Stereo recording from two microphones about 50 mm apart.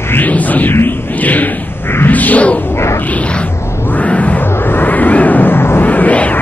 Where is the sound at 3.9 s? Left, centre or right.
Left.